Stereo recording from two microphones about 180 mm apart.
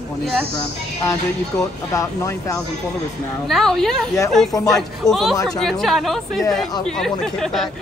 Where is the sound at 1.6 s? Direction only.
15° left (ahead or behind).